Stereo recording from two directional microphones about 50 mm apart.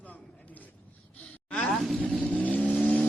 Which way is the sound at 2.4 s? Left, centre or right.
Left.